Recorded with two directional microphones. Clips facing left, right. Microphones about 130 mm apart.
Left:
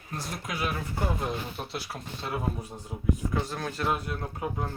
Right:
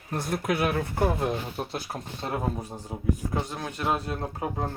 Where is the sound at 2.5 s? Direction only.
30° right (ahead or behind).